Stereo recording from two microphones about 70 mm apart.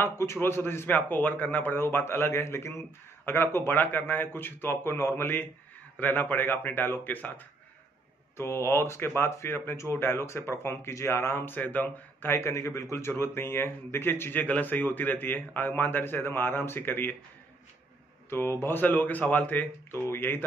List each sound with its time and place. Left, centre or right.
0.0 s speech: left
8.4 s speech: left
12.3 s speech: left
18.3 s speech: left
19.9 s speech: left